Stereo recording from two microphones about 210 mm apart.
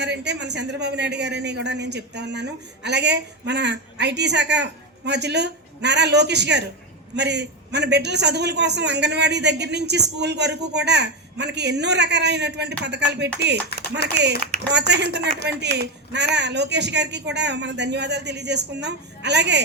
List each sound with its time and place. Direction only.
0.0 s a man's voice: 55° right (ahead or behind)
13.7 s a sound: 50° left (ahead or behind)
14.7 s a man's voice: 55° right (ahead or behind)